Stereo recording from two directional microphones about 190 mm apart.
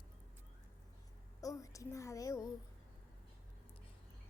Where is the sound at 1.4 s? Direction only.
15° left (ahead or behind).